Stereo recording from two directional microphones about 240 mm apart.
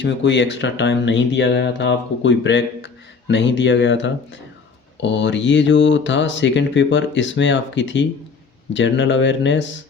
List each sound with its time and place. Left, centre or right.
0.0 s speech: left